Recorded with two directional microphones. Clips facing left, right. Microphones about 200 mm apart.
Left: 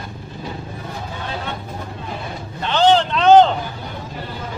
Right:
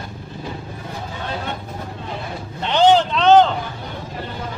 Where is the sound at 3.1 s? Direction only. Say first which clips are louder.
Left 1 dB; 5° left (ahead or behind).